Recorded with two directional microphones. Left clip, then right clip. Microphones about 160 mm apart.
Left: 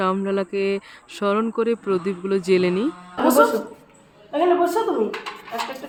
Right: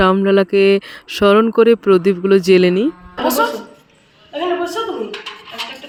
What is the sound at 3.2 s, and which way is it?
Speech, 10° left (ahead or behind).